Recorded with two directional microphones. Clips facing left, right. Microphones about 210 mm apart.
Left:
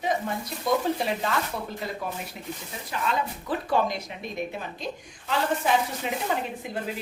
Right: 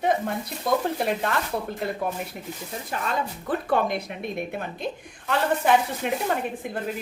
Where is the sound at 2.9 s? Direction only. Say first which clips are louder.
Even; 45° right (ahead or behind).